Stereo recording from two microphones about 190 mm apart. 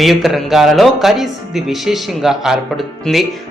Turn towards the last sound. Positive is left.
turn(degrees=0)  # may be behind; listen again after turning